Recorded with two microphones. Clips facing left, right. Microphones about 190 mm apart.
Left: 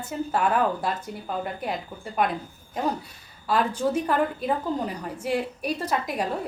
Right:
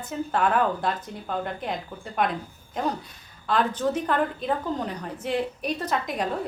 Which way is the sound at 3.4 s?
10° left (ahead or behind).